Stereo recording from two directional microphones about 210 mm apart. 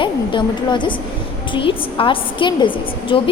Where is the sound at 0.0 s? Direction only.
20° left (ahead or behind).